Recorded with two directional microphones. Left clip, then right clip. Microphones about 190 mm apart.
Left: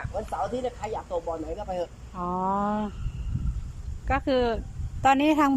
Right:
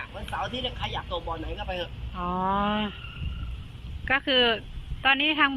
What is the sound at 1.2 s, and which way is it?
Speech, 35° left (ahead or behind).